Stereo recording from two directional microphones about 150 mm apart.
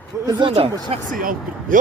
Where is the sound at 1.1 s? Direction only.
65° right (ahead or behind).